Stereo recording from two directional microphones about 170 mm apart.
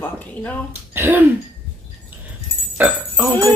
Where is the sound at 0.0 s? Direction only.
10° left (ahead or behind).